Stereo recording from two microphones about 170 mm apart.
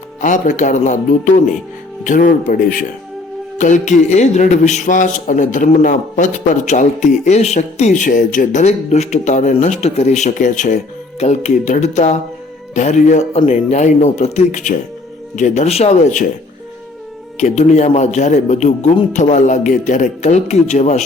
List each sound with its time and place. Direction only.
0.2 s a man's voice: 45° left (ahead or behind)
17.3 s a man's voice: 40° left (ahead or behind)